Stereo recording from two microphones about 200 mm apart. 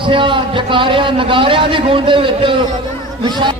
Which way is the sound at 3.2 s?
25° right (ahead or behind).